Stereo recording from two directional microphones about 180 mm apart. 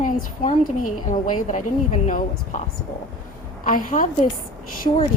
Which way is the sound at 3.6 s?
50° left (ahead or behind).